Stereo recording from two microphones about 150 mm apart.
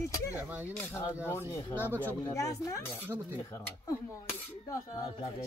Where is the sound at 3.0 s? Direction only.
15° right (ahead or behind).